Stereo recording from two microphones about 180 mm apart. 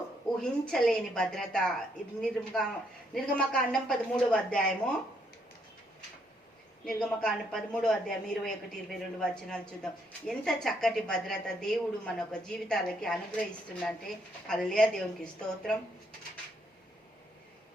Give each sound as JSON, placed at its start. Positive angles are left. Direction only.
{"t": 0.3, "sound": "a woman's voice", "side_deg": 5}
{"t": 6.8, "sound": "a woman's voice", "side_deg": 5}